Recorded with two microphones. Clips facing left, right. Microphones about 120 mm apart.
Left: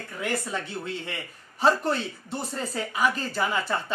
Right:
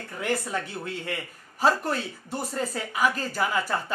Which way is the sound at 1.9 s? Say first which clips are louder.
Left 2 dB; 30° left (ahead or behind).